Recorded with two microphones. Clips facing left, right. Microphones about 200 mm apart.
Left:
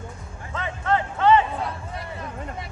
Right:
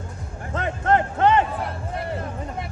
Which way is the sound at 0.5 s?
50° right (ahead or behind).